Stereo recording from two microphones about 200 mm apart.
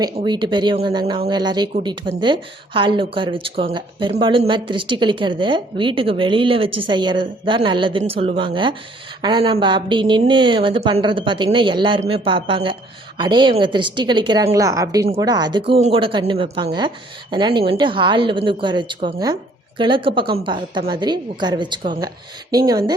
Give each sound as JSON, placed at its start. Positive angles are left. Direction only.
{"t": 0.0, "sound": "a woman's voice", "side_deg": -25}